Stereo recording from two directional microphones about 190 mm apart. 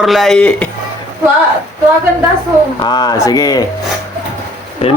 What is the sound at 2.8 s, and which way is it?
Speech, 20° left (ahead or behind).